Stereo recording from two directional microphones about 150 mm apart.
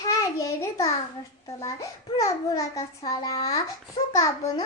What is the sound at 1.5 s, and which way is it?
A child's voice, 20° left (ahead or behind).